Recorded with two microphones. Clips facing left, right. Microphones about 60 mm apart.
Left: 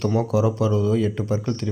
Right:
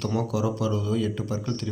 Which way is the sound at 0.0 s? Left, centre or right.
Left.